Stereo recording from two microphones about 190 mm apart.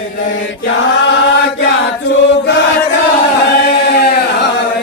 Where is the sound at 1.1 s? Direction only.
75° left (ahead or behind).